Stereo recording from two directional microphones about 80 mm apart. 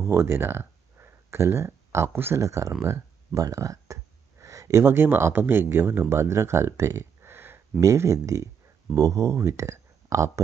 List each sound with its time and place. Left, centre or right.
0.0 s speech: right
7.8 s speech: right